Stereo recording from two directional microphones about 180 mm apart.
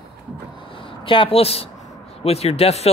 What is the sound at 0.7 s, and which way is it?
Speech, 30° left (ahead or behind).